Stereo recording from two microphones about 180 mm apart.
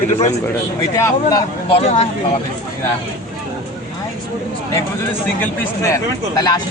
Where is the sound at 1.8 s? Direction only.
40° left (ahead or behind).